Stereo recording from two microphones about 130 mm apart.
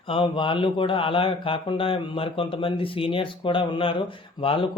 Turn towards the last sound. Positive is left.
turn(degrees=45)  # may be behind; listen again after turning